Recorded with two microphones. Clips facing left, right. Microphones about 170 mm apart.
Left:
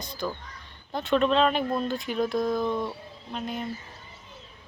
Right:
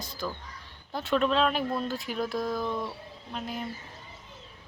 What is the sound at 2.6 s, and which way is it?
Speech, 20° left (ahead or behind).